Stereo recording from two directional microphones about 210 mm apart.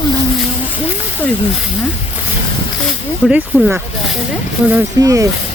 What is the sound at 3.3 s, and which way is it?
Speech, 5° right (ahead or behind).